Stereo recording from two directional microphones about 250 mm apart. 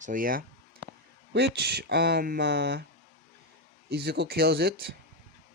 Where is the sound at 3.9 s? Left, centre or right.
Right.